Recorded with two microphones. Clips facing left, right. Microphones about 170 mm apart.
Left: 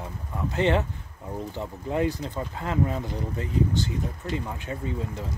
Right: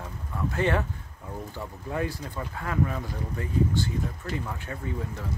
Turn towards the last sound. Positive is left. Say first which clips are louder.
# left 2 dB
turn(degrees=20)  # may be behind; listen again after turning